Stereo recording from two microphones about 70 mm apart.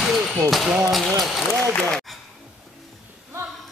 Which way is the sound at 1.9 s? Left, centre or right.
Centre.